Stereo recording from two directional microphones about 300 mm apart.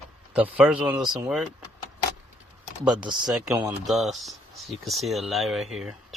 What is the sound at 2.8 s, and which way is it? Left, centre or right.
Speech, centre.